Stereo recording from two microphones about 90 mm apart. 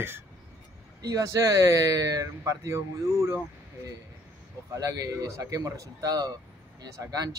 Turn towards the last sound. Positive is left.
turn(degrees=-40)  # may be behind; listen again after turning